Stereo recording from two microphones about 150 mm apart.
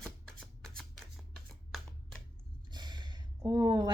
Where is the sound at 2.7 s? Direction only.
30° right (ahead or behind).